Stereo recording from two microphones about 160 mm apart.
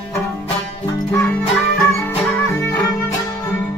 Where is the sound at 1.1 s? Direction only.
10° left (ahead or behind).